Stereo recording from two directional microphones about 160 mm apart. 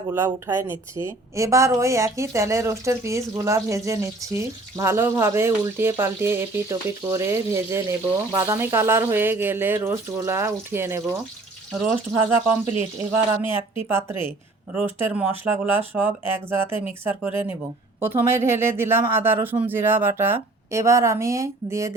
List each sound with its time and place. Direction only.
0.1 s a woman's voice: 15° right (ahead or behind)